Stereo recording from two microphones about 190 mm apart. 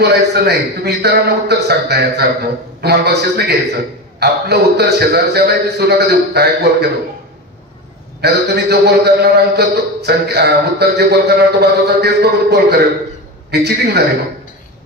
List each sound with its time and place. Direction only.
0.0 s a man's voice: 60° right (ahead or behind)
8.2 s a man's voice: 60° right (ahead or behind)